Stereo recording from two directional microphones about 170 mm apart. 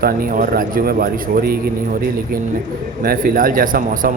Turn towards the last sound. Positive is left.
turn(degrees=-55)  # may be behind; listen again after turning